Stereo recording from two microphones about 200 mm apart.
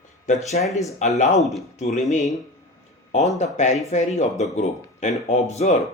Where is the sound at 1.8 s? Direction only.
35° left (ahead or behind).